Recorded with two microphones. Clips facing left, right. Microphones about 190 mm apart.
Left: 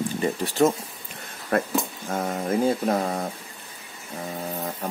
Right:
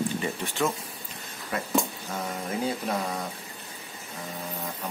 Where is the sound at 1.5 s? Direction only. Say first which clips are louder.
Left 4 dB; 55° left (ahead or behind).